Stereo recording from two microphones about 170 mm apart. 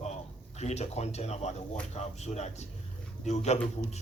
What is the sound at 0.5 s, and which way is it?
A man's voice, 40° left (ahead or behind).